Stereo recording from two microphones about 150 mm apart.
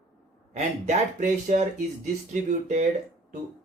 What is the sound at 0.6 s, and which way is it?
Speech, 50° right (ahead or behind).